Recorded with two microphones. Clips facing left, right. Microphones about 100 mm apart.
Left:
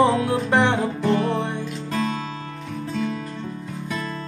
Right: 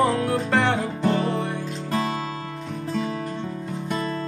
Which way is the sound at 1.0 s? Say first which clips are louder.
Left 1 dB; 15° right (ahead or behind).